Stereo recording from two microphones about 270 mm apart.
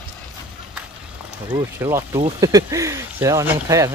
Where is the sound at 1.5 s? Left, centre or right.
Centre.